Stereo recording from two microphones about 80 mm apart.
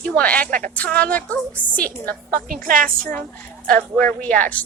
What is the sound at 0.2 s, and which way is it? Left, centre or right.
A woman's voice, centre.